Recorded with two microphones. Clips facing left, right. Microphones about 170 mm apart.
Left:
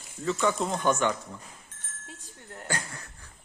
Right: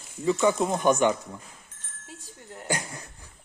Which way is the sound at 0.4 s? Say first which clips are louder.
Right 3 dB; 15° right (ahead or behind).